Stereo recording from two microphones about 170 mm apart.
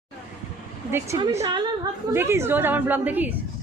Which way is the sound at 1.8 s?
15° right (ahead or behind).